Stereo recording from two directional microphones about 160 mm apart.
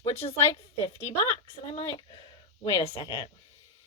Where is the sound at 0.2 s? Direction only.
35° left (ahead or behind).